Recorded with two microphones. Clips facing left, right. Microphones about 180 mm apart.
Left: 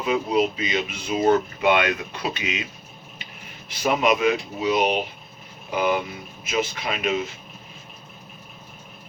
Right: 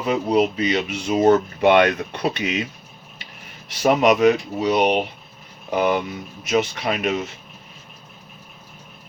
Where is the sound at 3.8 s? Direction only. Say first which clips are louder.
Right 5 dB; 40° right (ahead or behind).